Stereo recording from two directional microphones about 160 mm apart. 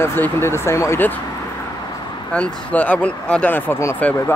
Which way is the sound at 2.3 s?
10° left (ahead or behind).